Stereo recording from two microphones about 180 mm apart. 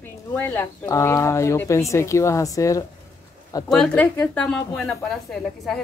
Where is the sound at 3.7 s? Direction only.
5° left (ahead or behind).